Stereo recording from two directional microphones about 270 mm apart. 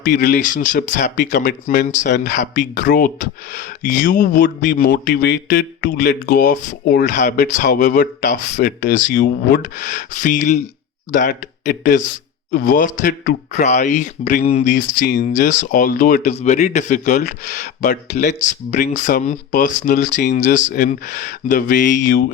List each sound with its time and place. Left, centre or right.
0.0 s speech: left